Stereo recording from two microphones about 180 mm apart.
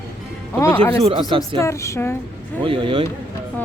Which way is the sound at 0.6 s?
10° left (ahead or behind).